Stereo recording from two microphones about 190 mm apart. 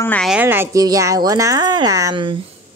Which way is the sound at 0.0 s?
10° left (ahead or behind).